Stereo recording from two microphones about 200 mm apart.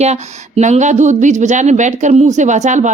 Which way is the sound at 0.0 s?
35° right (ahead or behind).